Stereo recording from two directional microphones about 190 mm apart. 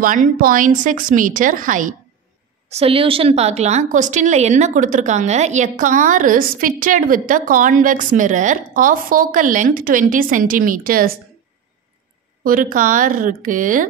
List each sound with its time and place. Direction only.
0.0 s a woman's voice: 45° right (ahead or behind)
2.7 s a woman's voice: 30° right (ahead or behind); by 11.1 s 50° right (ahead or behind)
12.4 s a woman's voice: 45° right (ahead or behind)